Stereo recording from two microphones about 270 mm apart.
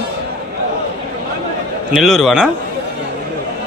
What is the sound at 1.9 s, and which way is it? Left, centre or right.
Speech, centre.